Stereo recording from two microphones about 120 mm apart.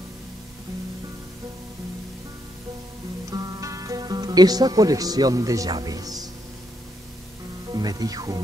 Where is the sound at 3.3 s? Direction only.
30° right (ahead or behind).